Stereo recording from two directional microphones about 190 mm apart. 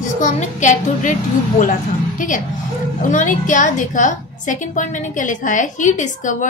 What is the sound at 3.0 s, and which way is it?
A woman's voice, 45° left (ahead or behind).